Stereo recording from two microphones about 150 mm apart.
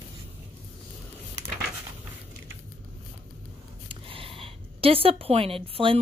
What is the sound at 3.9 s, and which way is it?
Speech, 35° right (ahead or behind).